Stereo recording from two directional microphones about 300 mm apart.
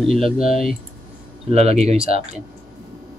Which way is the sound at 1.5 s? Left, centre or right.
Right.